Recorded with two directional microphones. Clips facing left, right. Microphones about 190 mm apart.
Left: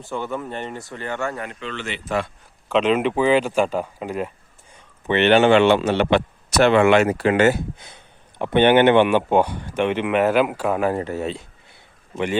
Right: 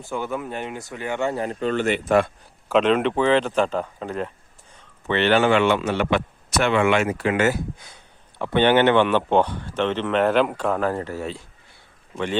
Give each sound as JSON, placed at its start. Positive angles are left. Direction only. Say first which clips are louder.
{"t": 0.1, "sound": "speech", "louder": "even", "side_deg": -5}
{"t": 1.4, "sound": "speech", "louder": "right 8 dB", "side_deg": -40}
{"t": 2.6, "sound": "a man's voice", "louder": "even", "side_deg": 0}